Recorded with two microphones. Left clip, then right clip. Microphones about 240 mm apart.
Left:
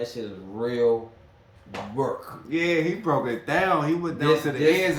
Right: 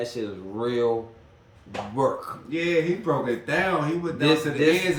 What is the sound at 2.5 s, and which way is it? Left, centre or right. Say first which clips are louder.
Speech: even; centre.